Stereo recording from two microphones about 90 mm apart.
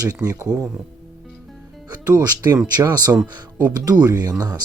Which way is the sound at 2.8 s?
45° right (ahead or behind).